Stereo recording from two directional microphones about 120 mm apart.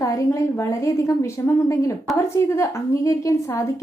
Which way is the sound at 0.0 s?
25° left (ahead or behind).